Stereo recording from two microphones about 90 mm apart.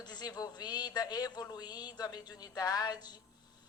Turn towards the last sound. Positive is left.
turn(degrees=50)  # may be behind; listen again after turning